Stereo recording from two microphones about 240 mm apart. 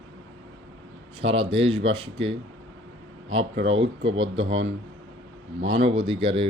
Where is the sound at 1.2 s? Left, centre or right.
Right.